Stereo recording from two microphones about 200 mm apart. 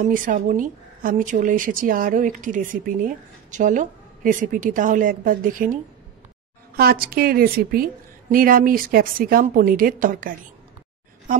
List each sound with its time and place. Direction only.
0.0 s speech: 40° right (ahead or behind)
6.8 s a woman's voice: 50° right (ahead or behind)